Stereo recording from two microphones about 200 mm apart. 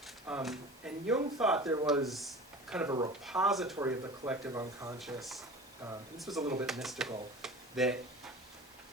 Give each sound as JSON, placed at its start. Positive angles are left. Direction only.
{"t": 0.3, "sound": "a sound", "side_deg": -5}
{"t": 1.4, "sound": "speech", "side_deg": -5}
{"t": 1.6, "sound": "speech", "side_deg": -15}
{"t": 2.0, "sound": "a sound", "side_deg": 0}
{"t": 2.8, "sound": "speech", "side_deg": -20}
{"t": 3.2, "sound": "speech", "side_deg": 0}
{"t": 3.8, "sound": "speech", "side_deg": -10}
{"t": 4.9, "sound": "speech", "side_deg": 0}
{"t": 7.4, "sound": "a sound", "side_deg": 0}